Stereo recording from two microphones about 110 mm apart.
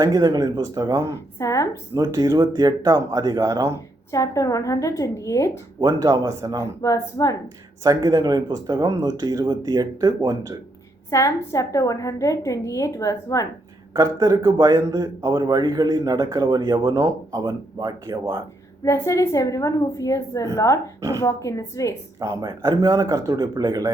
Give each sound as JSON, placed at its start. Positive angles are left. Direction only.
{"t": 0.0, "sound": "speech", "side_deg": -35}
{"t": 1.4, "sound": "a woman's voice", "side_deg": 30}
{"t": 2.0, "sound": "speech", "side_deg": -30}
{"t": 4.1, "sound": "a woman's voice", "side_deg": 30}
{"t": 5.8, "sound": "speech", "side_deg": -30}
{"t": 6.8, "sound": "speech", "side_deg": 30}
{"t": 7.9, "sound": "speech", "side_deg": -35}
{"t": 11.1, "sound": "a woman's voice", "side_deg": 25}
{"t": 13.9, "sound": "speech", "side_deg": -35}
{"t": 18.9, "sound": "a woman's voice", "side_deg": 30}
{"t": 22.2, "sound": "speech", "side_deg": -35}